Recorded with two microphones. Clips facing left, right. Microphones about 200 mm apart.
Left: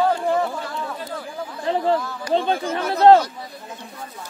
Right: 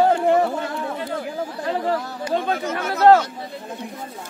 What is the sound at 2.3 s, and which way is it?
Speech, 30° left (ahead or behind).